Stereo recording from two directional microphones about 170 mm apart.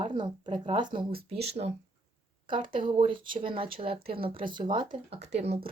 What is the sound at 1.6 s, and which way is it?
Speech, 45° right (ahead or behind).